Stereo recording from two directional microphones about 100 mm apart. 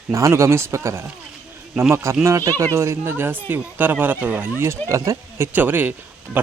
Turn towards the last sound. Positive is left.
turn(degrees=-20)  # may be behind; listen again after turning